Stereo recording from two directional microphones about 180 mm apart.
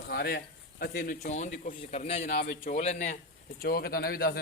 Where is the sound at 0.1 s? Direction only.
65° left (ahead or behind); by 3.2 s 40° left (ahead or behind).